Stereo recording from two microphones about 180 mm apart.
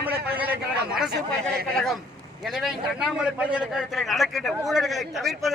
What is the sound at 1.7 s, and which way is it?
A man's voice, centre (ahead or behind).